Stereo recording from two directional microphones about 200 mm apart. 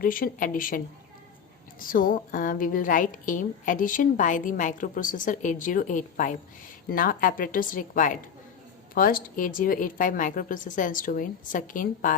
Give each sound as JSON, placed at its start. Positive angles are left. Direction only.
{"t": 0.0, "sound": "a woman's voice", "side_deg": 45}
{"t": 1.8, "sound": "a woman's voice", "side_deg": 45}